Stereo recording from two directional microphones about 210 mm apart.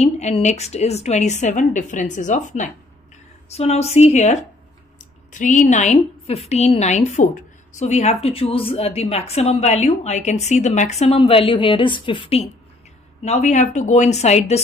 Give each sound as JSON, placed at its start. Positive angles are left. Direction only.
{"t": 0.0, "sound": "a woman's voice", "side_deg": 30}